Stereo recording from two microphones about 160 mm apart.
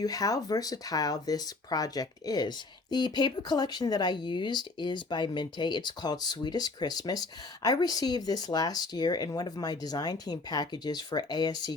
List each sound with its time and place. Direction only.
0.0 s speech: 25° left (ahead or behind)